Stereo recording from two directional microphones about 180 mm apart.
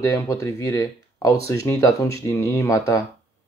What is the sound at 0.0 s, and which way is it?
Speech, 15° left (ahead or behind).